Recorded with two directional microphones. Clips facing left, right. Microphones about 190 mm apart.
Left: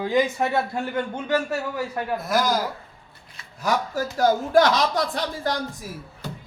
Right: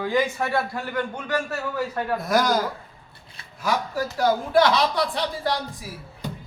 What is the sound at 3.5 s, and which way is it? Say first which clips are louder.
Speech: left 1 dB; 40° left (ahead or behind).